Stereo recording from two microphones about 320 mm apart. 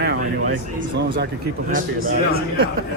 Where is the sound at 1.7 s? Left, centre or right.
Right.